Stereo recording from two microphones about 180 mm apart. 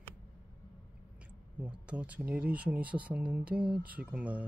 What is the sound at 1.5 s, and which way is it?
Speech, 5° right (ahead or behind).